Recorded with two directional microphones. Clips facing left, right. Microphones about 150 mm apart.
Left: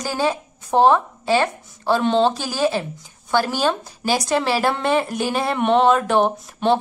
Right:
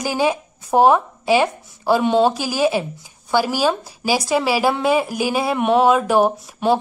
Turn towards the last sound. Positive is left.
turn(degrees=-5)  # may be behind; listen again after turning